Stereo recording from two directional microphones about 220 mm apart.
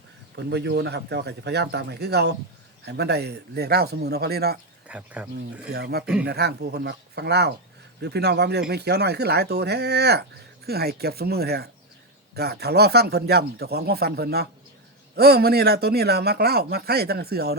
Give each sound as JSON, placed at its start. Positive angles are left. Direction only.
{"t": 0.3, "sound": "speech", "side_deg": -50}
{"t": 4.9, "sound": "speech", "side_deg": -5}
{"t": 5.6, "sound": "speech", "side_deg": -45}